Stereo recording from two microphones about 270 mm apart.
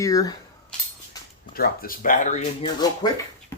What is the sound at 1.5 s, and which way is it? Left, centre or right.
Speech, left.